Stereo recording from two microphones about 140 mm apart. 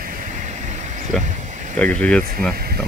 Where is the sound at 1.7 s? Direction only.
10° left (ahead or behind).